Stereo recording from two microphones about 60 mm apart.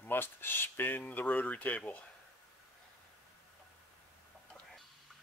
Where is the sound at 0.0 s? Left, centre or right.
Left.